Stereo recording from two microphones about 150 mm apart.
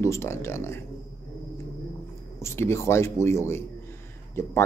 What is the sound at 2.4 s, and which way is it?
Speech, 20° left (ahead or behind).